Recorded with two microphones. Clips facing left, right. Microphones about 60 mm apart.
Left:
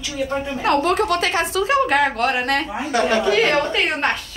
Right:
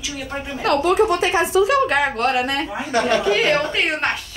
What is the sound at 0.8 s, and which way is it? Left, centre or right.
Speech, left.